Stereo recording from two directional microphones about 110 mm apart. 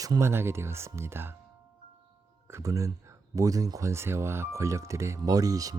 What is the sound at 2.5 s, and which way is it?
Speech, 30° right (ahead or behind).